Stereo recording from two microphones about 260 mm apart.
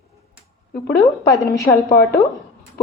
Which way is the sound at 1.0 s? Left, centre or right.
Centre.